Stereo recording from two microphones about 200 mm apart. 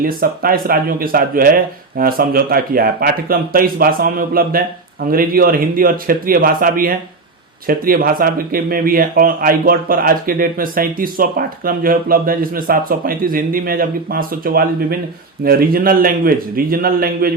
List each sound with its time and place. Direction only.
0.0 s speech: 45° right (ahead or behind)